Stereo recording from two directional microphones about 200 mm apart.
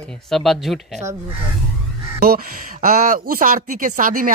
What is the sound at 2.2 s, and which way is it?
Speech, 45° right (ahead or behind).